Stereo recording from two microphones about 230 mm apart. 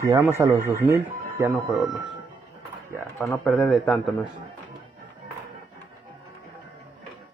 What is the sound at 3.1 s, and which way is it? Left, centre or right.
Speech, centre.